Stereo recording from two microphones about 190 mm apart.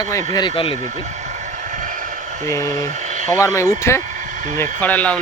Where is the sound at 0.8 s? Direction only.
40° right (ahead or behind).